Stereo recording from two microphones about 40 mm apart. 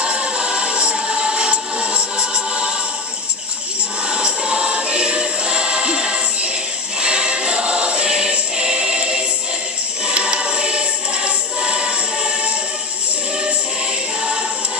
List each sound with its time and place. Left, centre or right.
0.0 s music: right
4.1 s choir: right